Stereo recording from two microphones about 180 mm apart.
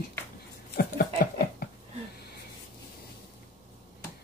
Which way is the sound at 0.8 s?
60° left (ahead or behind).